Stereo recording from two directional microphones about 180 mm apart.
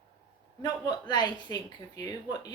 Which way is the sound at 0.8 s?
25° left (ahead or behind).